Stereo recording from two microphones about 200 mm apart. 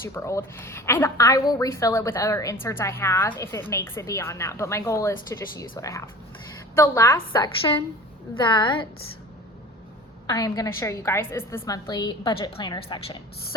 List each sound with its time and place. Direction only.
0.0 s a woman's voice: 15° left (ahead or behind)
10.2 s a woman's voice: 15° left (ahead or behind)